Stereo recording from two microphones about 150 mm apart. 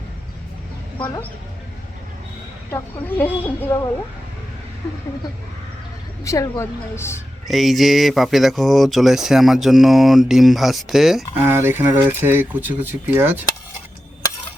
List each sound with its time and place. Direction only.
2.6 s speech: 15° left (ahead or behind)
6.2 s a woman's voice: 20° left (ahead or behind)
7.4 s speech: centre (ahead or behind)
11.4 s speech: 15° right (ahead or behind)